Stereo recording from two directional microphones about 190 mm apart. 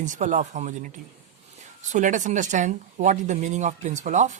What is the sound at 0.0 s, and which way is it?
Speech, 40° right (ahead or behind).